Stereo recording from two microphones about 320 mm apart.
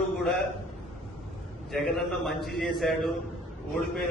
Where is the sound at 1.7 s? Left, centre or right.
Centre.